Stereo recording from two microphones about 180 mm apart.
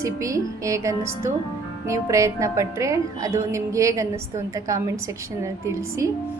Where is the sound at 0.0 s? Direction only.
15° right (ahead or behind).